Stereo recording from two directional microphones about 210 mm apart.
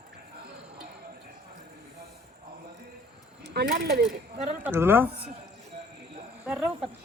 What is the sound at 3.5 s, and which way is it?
Speech, 50° right (ahead or behind).